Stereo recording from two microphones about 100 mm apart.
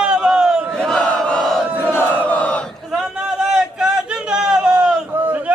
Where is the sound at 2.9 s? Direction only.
5° right (ahead or behind).